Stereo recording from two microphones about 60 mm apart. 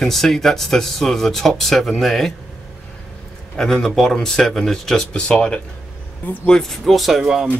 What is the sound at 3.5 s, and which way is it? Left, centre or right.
Speech, centre.